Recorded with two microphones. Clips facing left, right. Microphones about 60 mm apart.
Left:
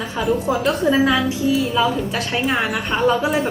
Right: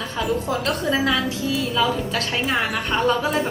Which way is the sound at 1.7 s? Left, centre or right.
Centre.